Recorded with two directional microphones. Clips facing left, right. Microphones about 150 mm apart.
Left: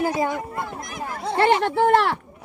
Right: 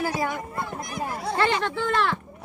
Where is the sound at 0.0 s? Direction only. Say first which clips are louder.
Left 4 dB; 20° left (ahead or behind).